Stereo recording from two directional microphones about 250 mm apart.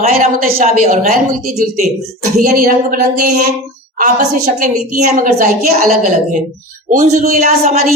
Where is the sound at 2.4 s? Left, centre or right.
Right.